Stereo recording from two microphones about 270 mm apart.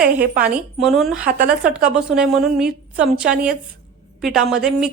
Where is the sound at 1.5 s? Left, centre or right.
Centre.